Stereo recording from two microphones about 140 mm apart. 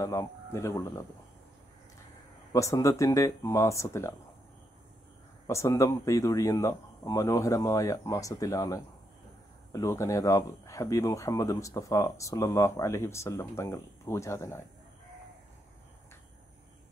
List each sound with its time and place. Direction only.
0.0 s speech: 20° left (ahead or behind)
2.5 s speech: 20° left (ahead or behind)
5.5 s speech: 20° left (ahead or behind)